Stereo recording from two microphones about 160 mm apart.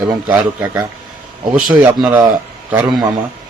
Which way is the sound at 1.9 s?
5° right (ahead or behind).